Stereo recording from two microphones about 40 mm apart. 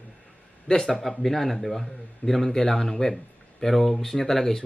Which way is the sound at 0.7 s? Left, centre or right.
Left.